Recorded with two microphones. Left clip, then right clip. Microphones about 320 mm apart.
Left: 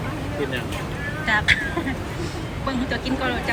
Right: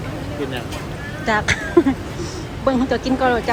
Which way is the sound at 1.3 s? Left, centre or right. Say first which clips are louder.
Right 1 dB; centre.